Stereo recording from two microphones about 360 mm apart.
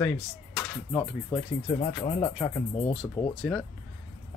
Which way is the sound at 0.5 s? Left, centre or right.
Centre.